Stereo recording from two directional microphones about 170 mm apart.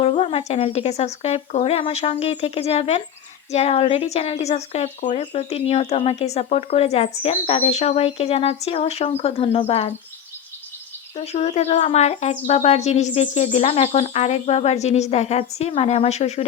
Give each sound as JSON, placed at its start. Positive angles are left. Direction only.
{"t": 0.0, "sound": "a woman's voice", "side_deg": 35}
{"t": 11.2, "sound": "a woman's voice", "side_deg": 40}